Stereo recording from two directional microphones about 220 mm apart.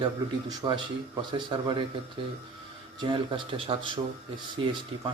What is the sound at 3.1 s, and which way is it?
Speech, 25° right (ahead or behind).